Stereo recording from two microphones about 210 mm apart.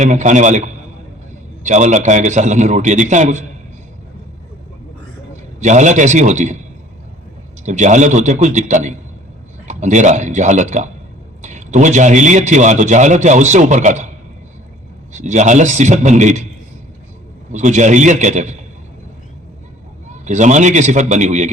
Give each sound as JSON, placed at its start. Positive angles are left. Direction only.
{"t": 0.0, "sound": "a man's voice", "side_deg": -35}
{"t": 1.6, "sound": "a man's voice", "side_deg": -35}
{"t": 5.5, "sound": "a man's voice", "side_deg": -35}
{"t": 7.6, "sound": "a man's voice", "side_deg": -35}
{"t": 15.1, "sound": "a man's voice", "side_deg": -35}
{"t": 17.5, "sound": "a man's voice", "side_deg": -35}
{"t": 20.1, "sound": "a man's voice", "side_deg": -35}